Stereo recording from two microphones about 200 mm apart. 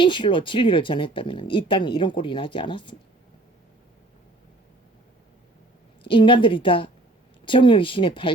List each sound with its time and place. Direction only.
0.0 s speech: 25° left (ahead or behind)
6.1 s speech: 25° left (ahead or behind)